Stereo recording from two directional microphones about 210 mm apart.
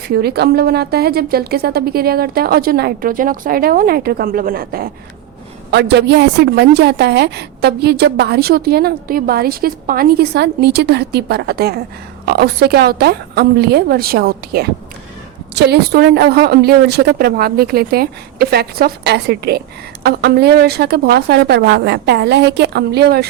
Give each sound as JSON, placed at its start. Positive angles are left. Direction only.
{"t": 0.1, "sound": "speech", "side_deg": -50}